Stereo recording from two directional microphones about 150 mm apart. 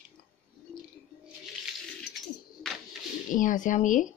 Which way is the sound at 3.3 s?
60° left (ahead or behind).